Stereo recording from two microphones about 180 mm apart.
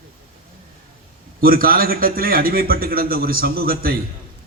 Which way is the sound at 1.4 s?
55° right (ahead or behind).